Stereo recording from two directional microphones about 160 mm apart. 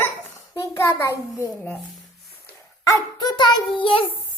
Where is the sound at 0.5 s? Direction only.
15° left (ahead or behind).